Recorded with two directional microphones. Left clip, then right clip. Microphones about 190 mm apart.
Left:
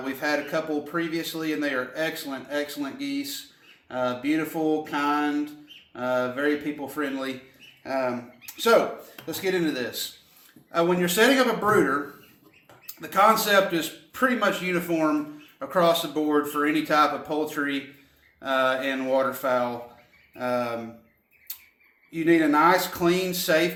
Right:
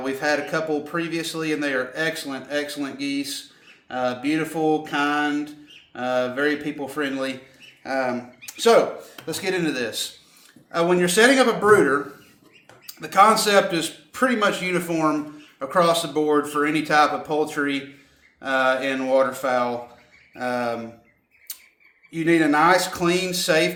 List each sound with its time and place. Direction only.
0.0 s speech: 35° right (ahead or behind)
13.0 s speech: 30° right (ahead or behind)
22.1 s speech: 30° right (ahead or behind)